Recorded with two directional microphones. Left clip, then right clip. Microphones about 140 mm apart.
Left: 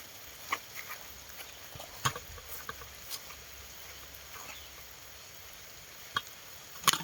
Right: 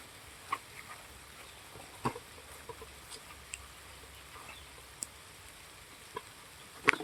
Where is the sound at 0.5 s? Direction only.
80° left.